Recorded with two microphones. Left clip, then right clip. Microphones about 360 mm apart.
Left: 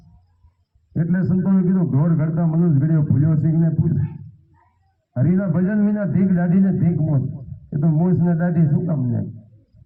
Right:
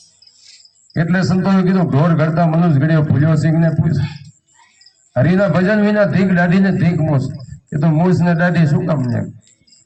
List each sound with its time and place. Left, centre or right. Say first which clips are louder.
0.9 s a man's voice: right 6 dB; right
5.1 s a man's voice: right 9 dB; right